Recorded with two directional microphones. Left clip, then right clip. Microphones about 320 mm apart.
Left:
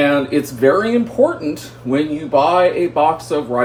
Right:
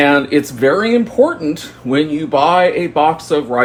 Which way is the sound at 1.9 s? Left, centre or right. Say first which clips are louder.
Right 1 dB; right.